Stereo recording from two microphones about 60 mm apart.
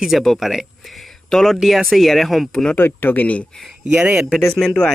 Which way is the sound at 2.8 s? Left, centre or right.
Left.